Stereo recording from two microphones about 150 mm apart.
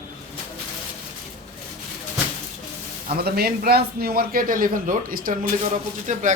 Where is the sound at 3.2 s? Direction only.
90° right; by 5.3 s 70° right (ahead or behind).